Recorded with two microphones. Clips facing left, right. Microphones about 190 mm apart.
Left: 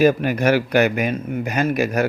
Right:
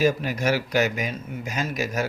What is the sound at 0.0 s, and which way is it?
Speech, 60° left (ahead or behind).